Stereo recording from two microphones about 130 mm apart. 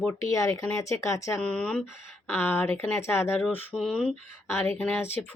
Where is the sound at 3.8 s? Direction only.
5° left (ahead or behind).